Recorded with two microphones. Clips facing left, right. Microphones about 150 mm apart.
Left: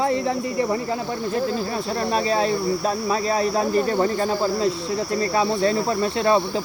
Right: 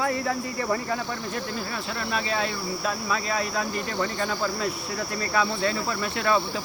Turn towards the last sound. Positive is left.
turn(degrees=30)  # may be behind; listen again after turning